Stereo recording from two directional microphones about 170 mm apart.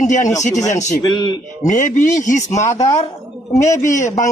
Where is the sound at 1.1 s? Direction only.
25° left (ahead or behind).